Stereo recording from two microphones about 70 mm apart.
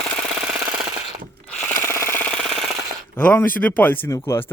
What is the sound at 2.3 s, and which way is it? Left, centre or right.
Rub, centre.